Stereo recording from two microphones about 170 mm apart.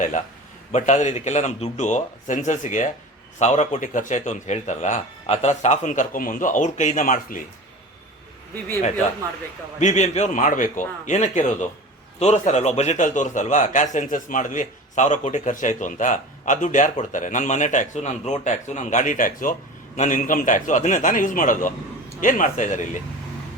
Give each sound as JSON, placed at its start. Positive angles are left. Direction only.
{"t": 0.7, "sound": "a man's voice", "side_deg": 45}
{"t": 9.8, "sound": "a man's voice", "side_deg": 45}